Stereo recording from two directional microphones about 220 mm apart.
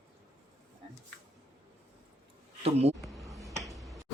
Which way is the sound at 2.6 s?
30° right (ahead or behind).